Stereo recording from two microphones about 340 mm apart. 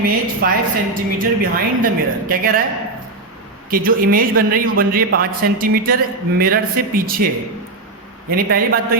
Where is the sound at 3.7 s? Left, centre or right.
Right.